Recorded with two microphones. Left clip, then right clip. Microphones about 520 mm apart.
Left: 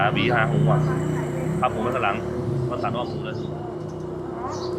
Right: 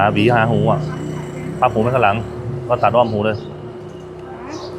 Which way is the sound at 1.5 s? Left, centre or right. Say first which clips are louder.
Right 9 dB; right.